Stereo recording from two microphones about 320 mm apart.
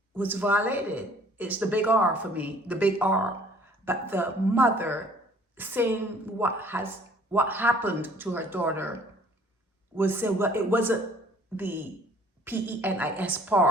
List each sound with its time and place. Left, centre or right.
0.1 s a woman's voice: centre